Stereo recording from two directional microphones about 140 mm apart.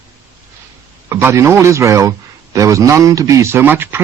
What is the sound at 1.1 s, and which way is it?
Speech, 20° right (ahead or behind).